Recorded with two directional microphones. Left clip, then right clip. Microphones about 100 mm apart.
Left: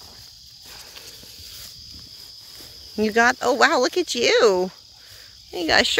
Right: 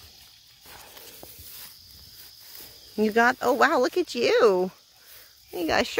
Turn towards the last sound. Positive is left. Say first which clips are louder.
# left 6 dB
turn(degrees=-5)  # may be behind; listen again after turning